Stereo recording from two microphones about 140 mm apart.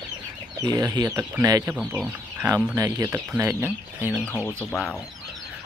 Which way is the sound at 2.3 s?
20° right (ahead or behind).